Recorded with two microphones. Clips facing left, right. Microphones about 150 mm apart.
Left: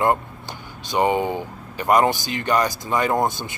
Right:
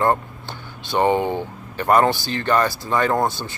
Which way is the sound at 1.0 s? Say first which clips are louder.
Right 1 dB; 10° left (ahead or behind).